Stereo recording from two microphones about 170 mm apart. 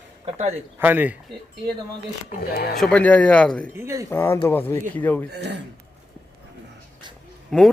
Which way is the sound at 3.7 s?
15° right (ahead or behind).